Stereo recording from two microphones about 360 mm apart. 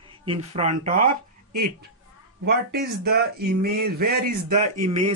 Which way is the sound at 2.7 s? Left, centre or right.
Right.